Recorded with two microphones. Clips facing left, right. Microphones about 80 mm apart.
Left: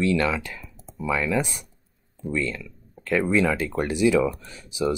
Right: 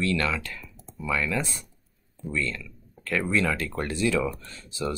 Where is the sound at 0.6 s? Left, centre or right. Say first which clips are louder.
Left 4 dB; centre.